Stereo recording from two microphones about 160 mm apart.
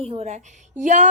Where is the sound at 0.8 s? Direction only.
50° right (ahead or behind).